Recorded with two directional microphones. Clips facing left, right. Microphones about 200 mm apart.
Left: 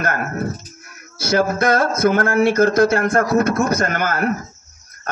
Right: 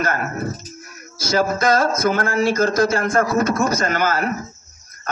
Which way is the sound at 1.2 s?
60° left (ahead or behind).